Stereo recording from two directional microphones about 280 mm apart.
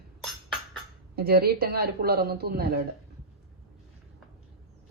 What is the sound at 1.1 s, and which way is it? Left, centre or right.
Speech, right.